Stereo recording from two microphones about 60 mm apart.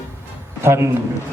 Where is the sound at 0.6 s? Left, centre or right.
Right.